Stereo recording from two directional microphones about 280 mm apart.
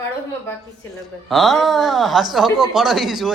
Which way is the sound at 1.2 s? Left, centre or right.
Centre.